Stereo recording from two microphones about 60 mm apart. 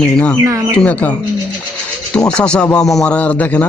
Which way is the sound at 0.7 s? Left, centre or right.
Left.